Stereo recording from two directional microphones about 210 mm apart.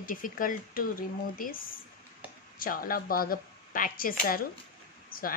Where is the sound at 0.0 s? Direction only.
40° left (ahead or behind).